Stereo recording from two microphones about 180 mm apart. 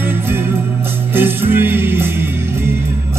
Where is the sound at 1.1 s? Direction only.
10° right (ahead or behind).